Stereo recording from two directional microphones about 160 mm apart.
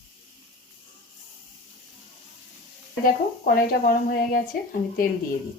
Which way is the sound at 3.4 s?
65° left (ahead or behind).